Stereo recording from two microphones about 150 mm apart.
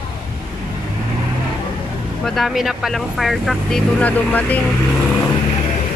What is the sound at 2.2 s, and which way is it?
Speech, centre (ahead or behind).